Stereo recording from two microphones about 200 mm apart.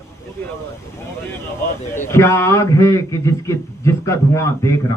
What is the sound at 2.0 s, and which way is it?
A man's voice, 15° left (ahead or behind).